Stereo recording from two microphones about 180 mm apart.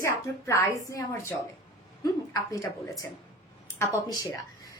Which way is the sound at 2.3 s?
20° left (ahead or behind).